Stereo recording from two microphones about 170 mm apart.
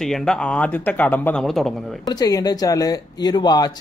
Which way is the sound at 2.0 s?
25° left (ahead or behind).